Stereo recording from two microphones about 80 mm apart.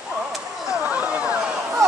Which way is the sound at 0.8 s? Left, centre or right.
Centre.